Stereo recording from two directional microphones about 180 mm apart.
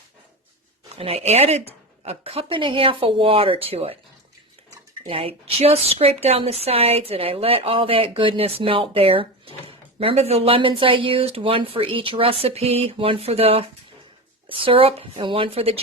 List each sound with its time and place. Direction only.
0.9 s a woman's voice: 35° right (ahead or behind)
5.0 s a woman's voice: 30° right (ahead or behind)